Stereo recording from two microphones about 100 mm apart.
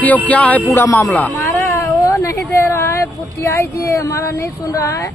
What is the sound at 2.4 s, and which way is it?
Speech, 25° left (ahead or behind).